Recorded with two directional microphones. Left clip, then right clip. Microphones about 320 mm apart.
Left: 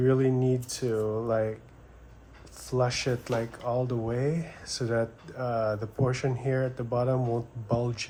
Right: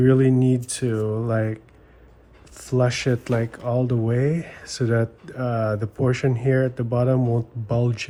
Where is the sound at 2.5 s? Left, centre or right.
Right.